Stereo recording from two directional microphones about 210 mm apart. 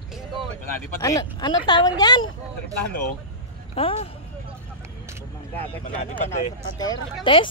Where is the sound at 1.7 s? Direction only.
20° left (ahead or behind).